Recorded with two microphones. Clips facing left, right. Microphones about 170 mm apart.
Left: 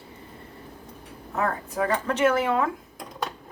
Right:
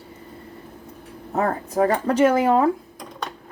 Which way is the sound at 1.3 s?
35° right (ahead or behind).